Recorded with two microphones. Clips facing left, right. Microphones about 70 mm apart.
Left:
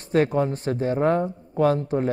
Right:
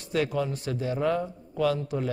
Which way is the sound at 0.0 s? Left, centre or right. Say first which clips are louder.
Left 6 dB; left.